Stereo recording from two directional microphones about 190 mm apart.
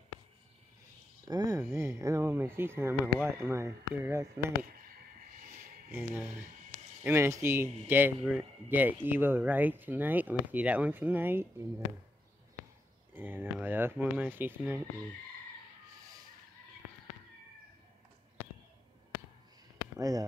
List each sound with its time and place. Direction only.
1.2 s speech: 20° right (ahead or behind)
5.9 s speech: 10° right (ahead or behind)
13.1 s speech: 10° right (ahead or behind)
20.0 s speech: 20° right (ahead or behind)